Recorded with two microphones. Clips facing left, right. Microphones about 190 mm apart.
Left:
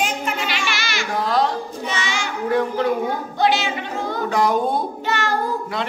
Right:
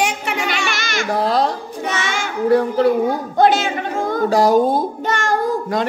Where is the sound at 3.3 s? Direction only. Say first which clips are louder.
Right 5 dB; 45° right (ahead or behind).